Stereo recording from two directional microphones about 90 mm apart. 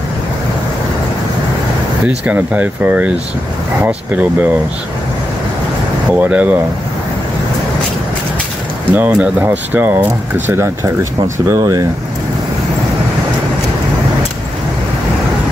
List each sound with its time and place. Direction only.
2.0 s speech: 15° right (ahead or behind)
6.1 s speech: 15° right (ahead or behind)
8.9 s speech: 15° right (ahead or behind); by 11.8 s 35° right (ahead or behind)